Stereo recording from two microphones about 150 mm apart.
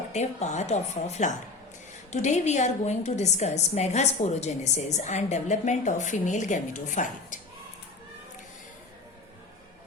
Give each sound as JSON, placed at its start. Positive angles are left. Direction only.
{"t": 0.1, "sound": "a woman's voice", "side_deg": 50}